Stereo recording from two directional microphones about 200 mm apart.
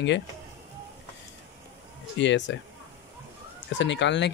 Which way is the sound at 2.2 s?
60° left (ahead or behind).